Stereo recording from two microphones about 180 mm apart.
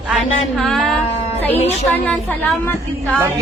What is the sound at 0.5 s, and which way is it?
Speech, centre (ahead or behind).